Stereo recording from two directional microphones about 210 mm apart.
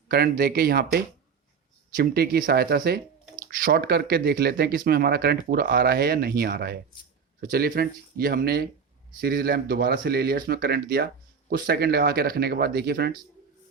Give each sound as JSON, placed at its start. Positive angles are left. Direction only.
{"t": 0.1, "sound": "speech", "side_deg": -45}